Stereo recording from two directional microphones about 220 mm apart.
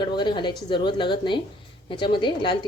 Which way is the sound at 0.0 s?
20° left (ahead or behind).